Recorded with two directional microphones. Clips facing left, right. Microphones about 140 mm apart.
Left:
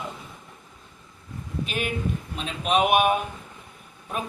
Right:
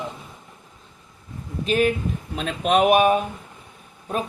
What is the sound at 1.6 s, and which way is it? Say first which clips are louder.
A man's voice: right 9 dB; 40° right (ahead or behind).